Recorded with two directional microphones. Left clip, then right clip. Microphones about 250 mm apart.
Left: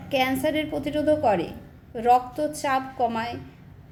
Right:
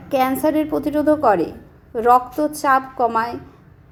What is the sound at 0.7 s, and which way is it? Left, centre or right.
A woman's voice, centre.